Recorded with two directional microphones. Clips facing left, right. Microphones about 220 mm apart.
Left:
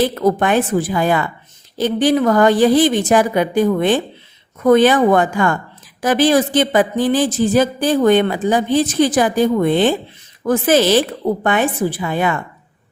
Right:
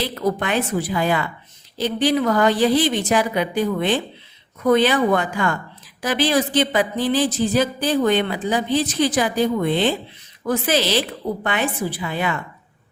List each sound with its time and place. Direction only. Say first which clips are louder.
0.0 s a woman's voice: left 7 dB; 45° left (ahead or behind)